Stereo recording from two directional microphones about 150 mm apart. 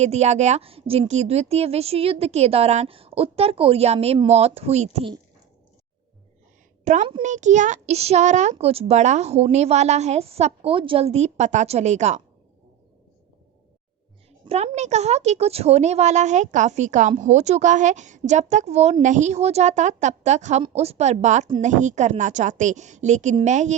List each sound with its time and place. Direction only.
0.0 s speech: 45° right (ahead or behind)
6.8 s a woman's voice: 55° right (ahead or behind)
14.4 s speech: 40° right (ahead or behind)